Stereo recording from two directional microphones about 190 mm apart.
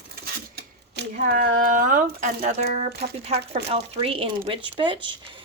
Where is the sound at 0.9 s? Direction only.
50° right (ahead or behind).